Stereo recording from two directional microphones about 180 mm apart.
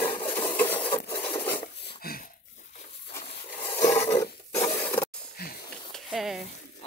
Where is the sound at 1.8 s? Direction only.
55° left (ahead or behind).